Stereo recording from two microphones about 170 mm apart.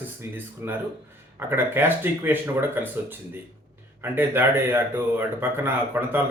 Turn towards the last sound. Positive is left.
turn(degrees=-10)  # may be behind; listen again after turning